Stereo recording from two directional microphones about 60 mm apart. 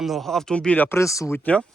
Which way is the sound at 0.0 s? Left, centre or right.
Centre.